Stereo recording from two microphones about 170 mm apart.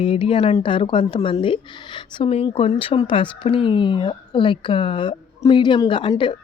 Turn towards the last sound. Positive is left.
turn(degrees=30)  # may be behind; listen again after turning